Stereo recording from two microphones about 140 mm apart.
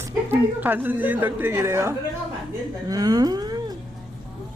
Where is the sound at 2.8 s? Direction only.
25° right (ahead or behind).